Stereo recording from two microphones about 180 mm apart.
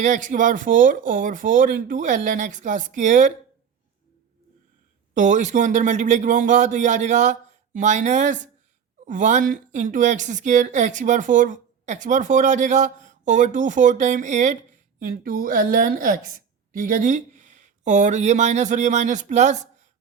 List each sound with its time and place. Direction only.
0.0 s a woman's voice: 45° right (ahead or behind)
5.1 s a woman's voice: 45° right (ahead or behind)